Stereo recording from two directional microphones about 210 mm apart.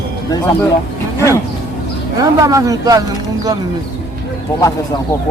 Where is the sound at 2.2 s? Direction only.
15° right (ahead or behind).